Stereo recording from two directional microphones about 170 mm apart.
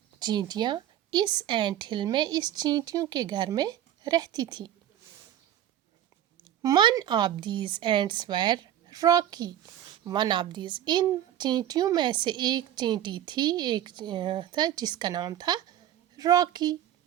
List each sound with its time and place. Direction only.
0.2 s a woman's voice: 25° right (ahead or behind)
6.6 s a woman's voice: 25° right (ahead or behind)